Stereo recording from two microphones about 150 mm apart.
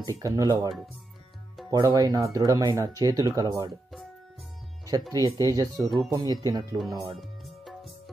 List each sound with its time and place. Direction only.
0.0 s speech: 25° right (ahead or behind)
5.1 s speech: 25° right (ahead or behind)
7.2 s music: centre (ahead or behind)